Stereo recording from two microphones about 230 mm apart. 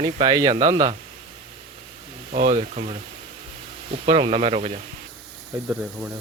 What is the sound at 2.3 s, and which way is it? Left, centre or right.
Speech, right.